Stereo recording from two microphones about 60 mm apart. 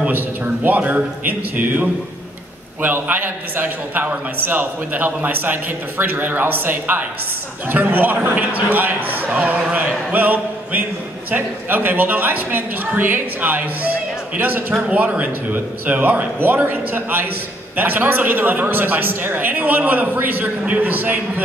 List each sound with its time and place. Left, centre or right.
0.7 s a man's voice: right